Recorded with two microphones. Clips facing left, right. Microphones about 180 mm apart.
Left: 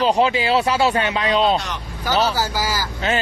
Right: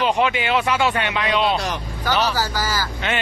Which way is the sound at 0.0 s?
35° left (ahead or behind).